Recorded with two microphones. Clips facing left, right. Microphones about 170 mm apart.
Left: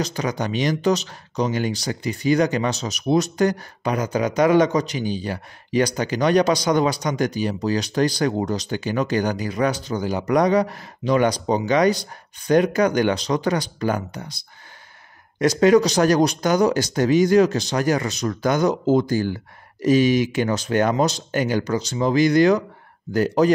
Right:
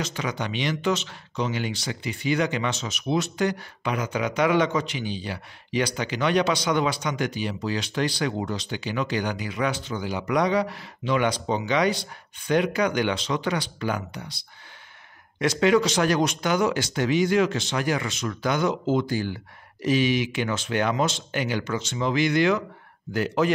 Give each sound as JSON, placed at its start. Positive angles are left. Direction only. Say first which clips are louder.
{"t": 0.0, "sound": "speech", "louder": "left 5 dB", "side_deg": 40}